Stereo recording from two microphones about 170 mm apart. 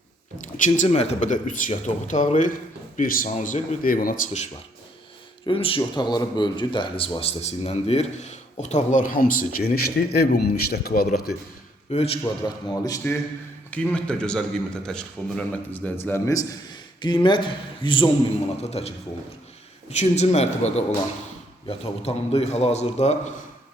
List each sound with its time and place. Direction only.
0.4 s speech: 45° left (ahead or behind)
5.5 s speech: 30° left (ahead or behind); by 11.3 s 65° left (ahead or behind)
11.9 s speech: 35° left (ahead or behind)
12.2 s a man's voice: 20° left (ahead or behind); by 23.3 s 40° left (ahead or behind)